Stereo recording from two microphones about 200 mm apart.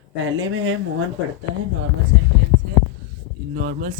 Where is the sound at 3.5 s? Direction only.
45° right (ahead or behind).